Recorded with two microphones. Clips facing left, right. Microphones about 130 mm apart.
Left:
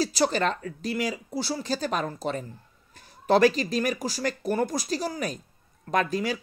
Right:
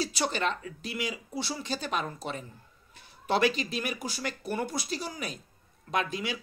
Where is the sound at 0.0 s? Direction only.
40° left (ahead or behind).